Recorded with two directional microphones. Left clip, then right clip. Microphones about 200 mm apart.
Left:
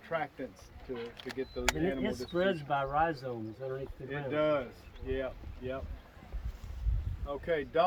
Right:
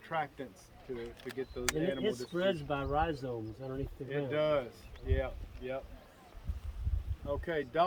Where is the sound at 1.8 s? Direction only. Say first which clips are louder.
Even; 10° right (ahead or behind).